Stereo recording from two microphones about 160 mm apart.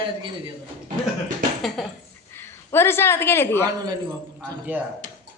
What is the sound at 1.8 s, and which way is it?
Speech, centre (ahead or behind).